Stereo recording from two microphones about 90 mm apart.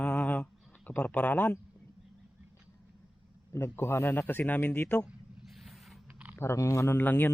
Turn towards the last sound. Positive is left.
turn(degrees=20)  # may be behind; listen again after turning